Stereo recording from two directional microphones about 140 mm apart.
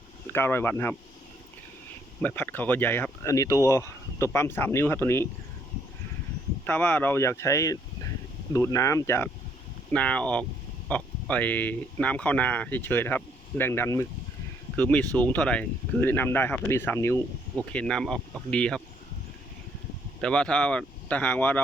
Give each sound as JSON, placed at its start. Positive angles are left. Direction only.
{"t": 0.3, "sound": "speech", "side_deg": 15}
{"t": 2.2, "sound": "speech", "side_deg": 15}
{"t": 6.7, "sound": "speech", "side_deg": 10}
{"t": 9.9, "sound": "speech", "side_deg": 10}
{"t": 20.2, "sound": "speech", "side_deg": 5}